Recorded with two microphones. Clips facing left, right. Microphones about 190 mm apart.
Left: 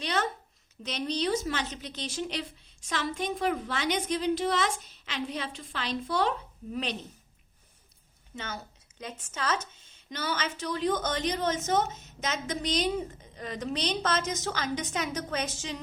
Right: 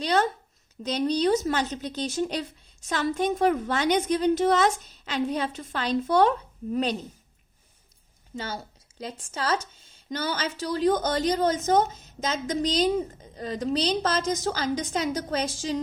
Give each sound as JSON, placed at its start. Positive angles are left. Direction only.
{"t": 0.0, "sound": "a woman's voice", "side_deg": -40}
{"t": 8.4, "sound": "a woman's voice", "side_deg": -35}